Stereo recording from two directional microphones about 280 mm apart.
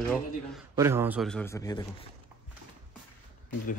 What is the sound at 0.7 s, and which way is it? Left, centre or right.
Speech, centre.